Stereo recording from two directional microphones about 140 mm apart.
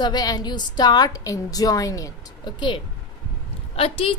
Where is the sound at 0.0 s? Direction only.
30° left (ahead or behind).